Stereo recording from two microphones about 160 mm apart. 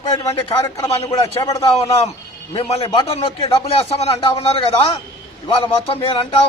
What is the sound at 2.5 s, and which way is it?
A man's voice, 30° left (ahead or behind).